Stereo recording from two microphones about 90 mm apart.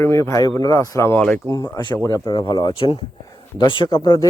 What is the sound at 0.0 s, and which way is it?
Speech, 30° left (ahead or behind).